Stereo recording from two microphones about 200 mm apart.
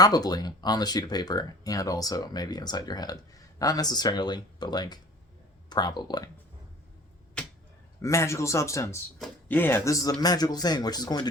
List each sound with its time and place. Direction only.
0.0 s speech: 20° left (ahead or behind)
8.0 s speech: 15° left (ahead or behind)